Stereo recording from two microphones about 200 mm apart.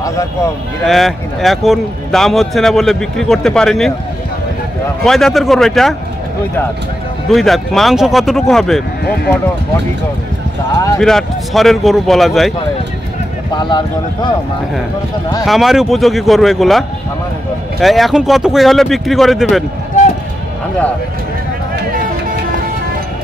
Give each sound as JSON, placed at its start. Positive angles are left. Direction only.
{"t": 0.8, "sound": "a man's voice", "side_deg": 0}
{"t": 5.0, "sound": "a man's voice", "side_deg": 0}
{"t": 7.2, "sound": "a man's voice", "side_deg": 0}
{"t": 11.0, "sound": "a man's voice", "side_deg": 0}
{"t": 13.5, "sound": "speech", "side_deg": 20}
{"t": 15.4, "sound": "a man's voice", "side_deg": 0}